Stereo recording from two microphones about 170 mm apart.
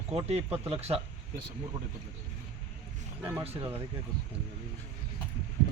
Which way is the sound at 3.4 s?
35° right (ahead or behind).